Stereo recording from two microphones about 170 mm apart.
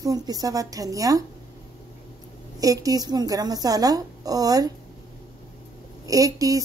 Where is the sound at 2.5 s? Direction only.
20° right (ahead or behind).